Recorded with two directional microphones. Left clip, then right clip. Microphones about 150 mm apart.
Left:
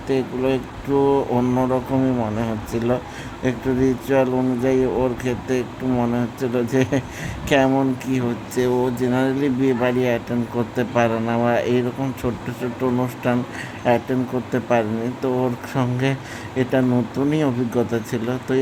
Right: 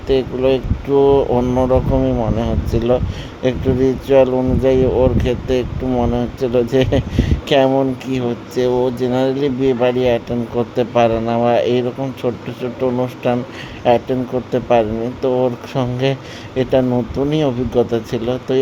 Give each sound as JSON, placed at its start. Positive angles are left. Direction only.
{"t": 0.1, "sound": "speech", "side_deg": -25}